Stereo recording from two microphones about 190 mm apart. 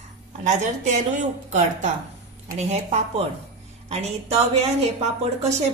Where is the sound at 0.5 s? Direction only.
40° right (ahead or behind).